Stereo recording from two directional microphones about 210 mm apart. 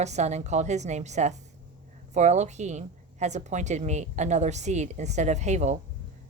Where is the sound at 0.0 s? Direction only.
30° right (ahead or behind).